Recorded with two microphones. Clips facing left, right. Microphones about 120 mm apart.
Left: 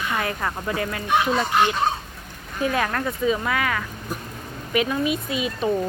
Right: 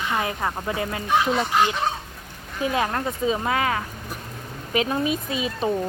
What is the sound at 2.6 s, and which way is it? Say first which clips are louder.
Speech: even; 20° right (ahead or behind).